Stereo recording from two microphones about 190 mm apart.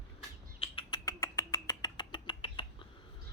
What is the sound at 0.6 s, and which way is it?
Rodents, 25° left (ahead or behind).